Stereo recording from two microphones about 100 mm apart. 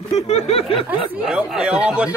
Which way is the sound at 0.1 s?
90° left.